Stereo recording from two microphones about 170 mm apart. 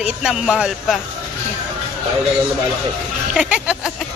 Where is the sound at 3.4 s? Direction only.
5° right (ahead or behind).